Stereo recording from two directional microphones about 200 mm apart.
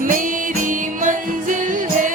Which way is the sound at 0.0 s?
40° right (ahead or behind).